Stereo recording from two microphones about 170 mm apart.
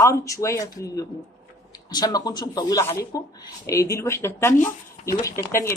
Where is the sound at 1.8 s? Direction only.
20° left (ahead or behind).